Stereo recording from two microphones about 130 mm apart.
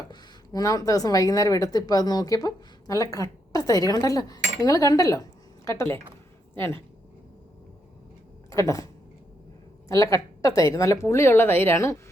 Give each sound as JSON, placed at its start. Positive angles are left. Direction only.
{"t": 0.1, "sound": "speech", "side_deg": 30}
{"t": 8.4, "sound": "speech", "side_deg": 25}
{"t": 9.9, "sound": "a woman's voice", "side_deg": 25}